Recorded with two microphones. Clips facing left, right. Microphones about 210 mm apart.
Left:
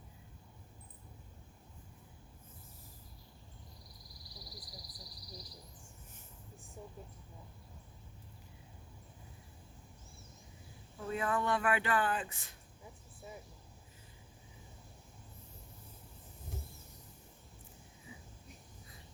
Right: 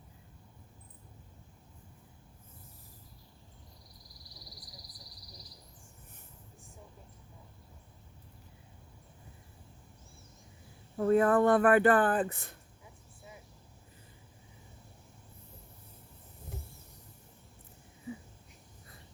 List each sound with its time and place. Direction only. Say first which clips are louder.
10.9 s speech: right 11 dB; 55° right (ahead or behind)